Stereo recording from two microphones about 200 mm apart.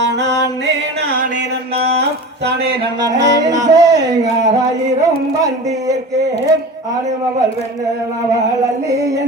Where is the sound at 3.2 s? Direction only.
60° right (ahead or behind).